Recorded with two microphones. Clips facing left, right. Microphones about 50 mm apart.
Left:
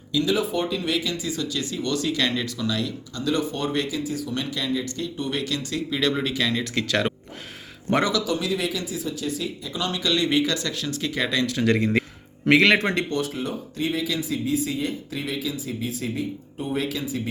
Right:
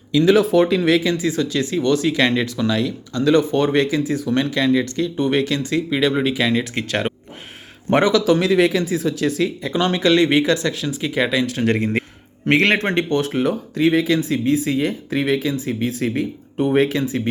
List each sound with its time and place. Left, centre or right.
0.1 s speech: right
0.3 s speech: right
1.0 s speech: right
3.1 s speech: right
5.1 s speech: right
6.1 s speech: centre
6.6 s speech: right
7.9 s speech: right
8.3 s speech: right
10.8 s speech: centre
11.4 s speech: right
13.4 s speech: right
14.0 s speech: right
16.7 s speech: right